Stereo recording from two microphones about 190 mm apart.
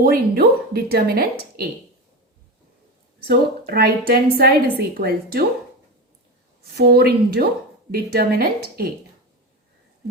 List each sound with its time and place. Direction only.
0.0 s speech: 55° right (ahead or behind)
3.2 s a woman's voice: 55° right (ahead or behind)
6.7 s a woman's voice: 55° right (ahead or behind)